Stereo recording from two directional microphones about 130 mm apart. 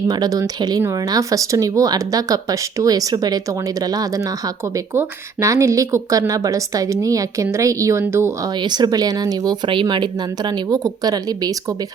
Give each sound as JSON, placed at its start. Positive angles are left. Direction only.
{"t": 0.1, "sound": "speech", "side_deg": -30}
{"t": 8.4, "sound": "speech", "side_deg": -35}